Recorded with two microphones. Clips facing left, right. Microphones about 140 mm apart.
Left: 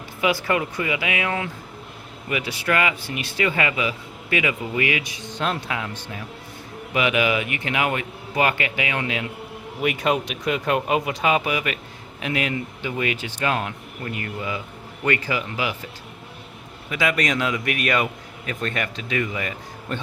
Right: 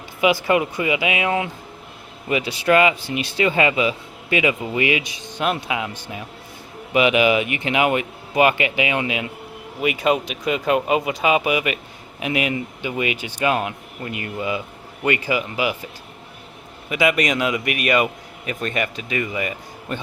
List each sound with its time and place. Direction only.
0.2 s a man's voice: 20° right (ahead or behind)
16.9 s a man's voice: 15° right (ahead or behind)